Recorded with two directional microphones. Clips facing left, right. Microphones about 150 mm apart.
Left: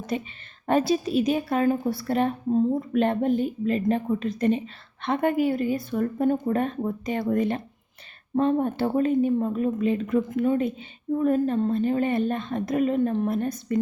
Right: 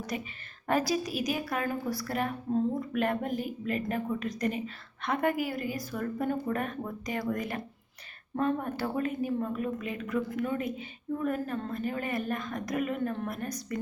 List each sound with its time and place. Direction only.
0.1 s a woman's voice: 25° left (ahead or behind)